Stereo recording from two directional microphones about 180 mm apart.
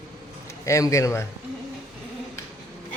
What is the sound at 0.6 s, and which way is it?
Speech, 15° left (ahead or behind).